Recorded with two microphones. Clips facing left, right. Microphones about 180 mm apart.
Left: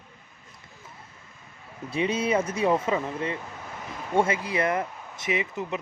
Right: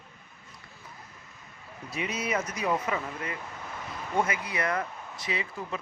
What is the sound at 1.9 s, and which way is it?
Speech, 30° left (ahead or behind).